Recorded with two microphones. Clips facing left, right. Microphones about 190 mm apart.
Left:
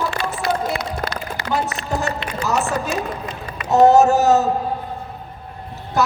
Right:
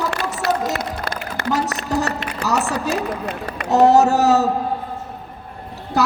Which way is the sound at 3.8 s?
35° right (ahead or behind).